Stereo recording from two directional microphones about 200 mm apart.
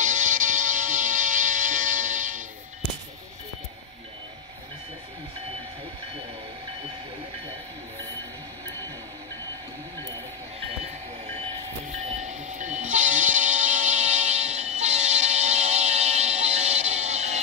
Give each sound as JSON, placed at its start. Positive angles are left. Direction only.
{"t": 0.0, "sound": "music", "side_deg": -40}
{"t": 12.0, "sound": "train", "side_deg": -35}